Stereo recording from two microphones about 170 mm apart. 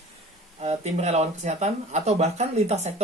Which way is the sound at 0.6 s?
40° right (ahead or behind).